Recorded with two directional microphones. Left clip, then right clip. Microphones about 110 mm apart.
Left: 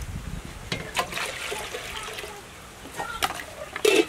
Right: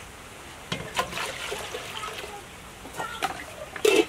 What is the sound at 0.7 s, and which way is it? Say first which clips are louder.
Water: left 1 dB; centre (ahead or behind).